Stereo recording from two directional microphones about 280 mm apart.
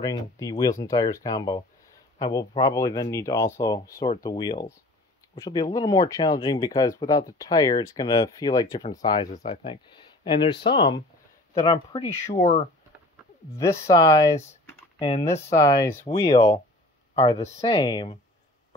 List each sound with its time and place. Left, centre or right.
0.0 s speech: centre
13.8 s speech: centre
16.3 s speech: left